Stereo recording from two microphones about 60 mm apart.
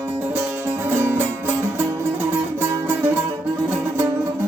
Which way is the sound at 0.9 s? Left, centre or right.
Right.